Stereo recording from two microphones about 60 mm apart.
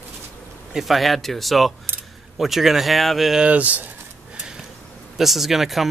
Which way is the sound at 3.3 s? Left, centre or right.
Right.